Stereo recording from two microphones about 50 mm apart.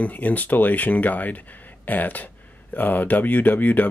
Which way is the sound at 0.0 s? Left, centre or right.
Left.